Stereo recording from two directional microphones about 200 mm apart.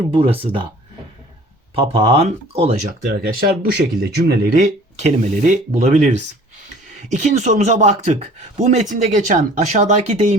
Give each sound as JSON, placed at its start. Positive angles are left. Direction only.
{"t": 0.1, "sound": "speech", "side_deg": -25}
{"t": 1.7, "sound": "speech", "side_deg": -30}
{"t": 3.1, "sound": "speech", "side_deg": -45}
{"t": 4.6, "sound": "speech", "side_deg": -35}